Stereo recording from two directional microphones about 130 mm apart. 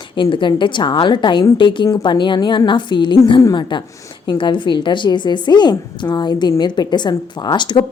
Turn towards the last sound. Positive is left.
turn(degrees=35)  # may be behind; listen again after turning